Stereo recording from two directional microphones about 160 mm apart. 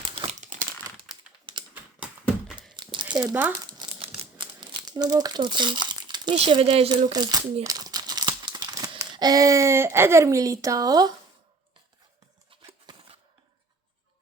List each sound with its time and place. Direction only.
0.2 s crumpling: 45° right (ahead or behind)
1.5 s typing: 30° right (ahead or behind)
2.7 s crumpling: 30° right (ahead or behind)
3.2 s speech: 15° right (ahead or behind)
3.7 s crumpling: 30° right (ahead or behind)
4.9 s speech: 25° right (ahead or behind)
7.1 s speech: 25° right (ahead or behind)
7.6 s crumpling: 25° right (ahead or behind)
9.0 s speech: 25° right (ahead or behind)
12.6 s a sound: 25° right (ahead or behind)